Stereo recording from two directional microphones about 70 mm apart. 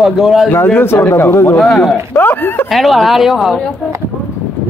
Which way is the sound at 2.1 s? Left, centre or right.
Left.